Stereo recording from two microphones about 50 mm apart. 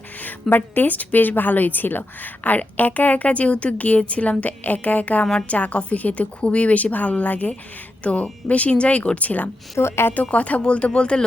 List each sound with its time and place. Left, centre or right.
0.5 s a woman's voice: left
9.7 s speech: left
10.2 s a woman's voice: left